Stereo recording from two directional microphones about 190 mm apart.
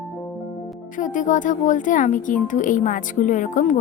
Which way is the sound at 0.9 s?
45° left (ahead or behind).